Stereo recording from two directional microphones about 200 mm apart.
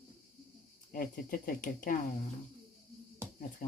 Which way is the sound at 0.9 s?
45° left (ahead or behind).